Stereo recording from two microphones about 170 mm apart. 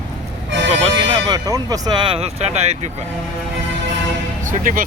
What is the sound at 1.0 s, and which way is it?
Speech, 30° right (ahead or behind).